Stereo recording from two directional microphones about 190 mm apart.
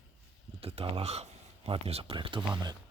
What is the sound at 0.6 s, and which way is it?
Speech, 30° right (ahead or behind).